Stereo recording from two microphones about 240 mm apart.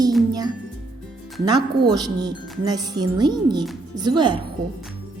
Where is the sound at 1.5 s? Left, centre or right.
Centre.